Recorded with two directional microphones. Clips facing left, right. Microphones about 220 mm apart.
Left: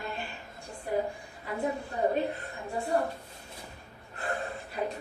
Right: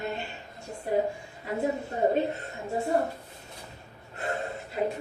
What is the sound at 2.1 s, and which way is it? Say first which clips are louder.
Speech: right 3 dB; 25° right (ahead or behind).